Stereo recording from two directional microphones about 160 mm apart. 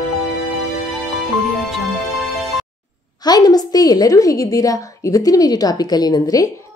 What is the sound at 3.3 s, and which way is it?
A woman's voice, 25° left (ahead or behind).